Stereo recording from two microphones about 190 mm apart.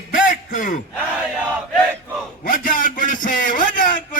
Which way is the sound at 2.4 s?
45° left (ahead or behind).